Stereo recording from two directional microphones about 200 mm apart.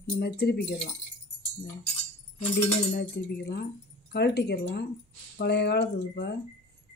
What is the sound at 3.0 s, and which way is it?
Speech, 55° left (ahead or behind).